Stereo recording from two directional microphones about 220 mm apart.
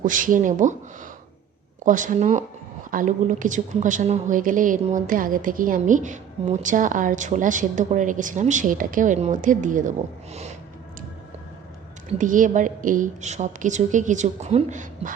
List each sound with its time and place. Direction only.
0.0 s a woman's voice: 35° right (ahead or behind)
1.8 s a woman's voice: 35° right (ahead or behind)
12.0 s a woman's voice: 35° right (ahead or behind)